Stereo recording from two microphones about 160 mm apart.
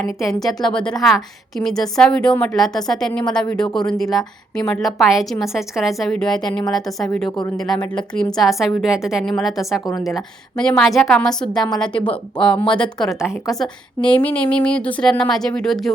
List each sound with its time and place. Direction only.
0.0 s a woman's voice: centre (ahead or behind)
7.3 s speech: 30° left (ahead or behind)
7.5 s a woman's voice: centre (ahead or behind)